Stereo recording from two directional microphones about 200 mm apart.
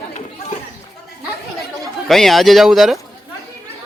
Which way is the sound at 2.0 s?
Centre (ahead or behind).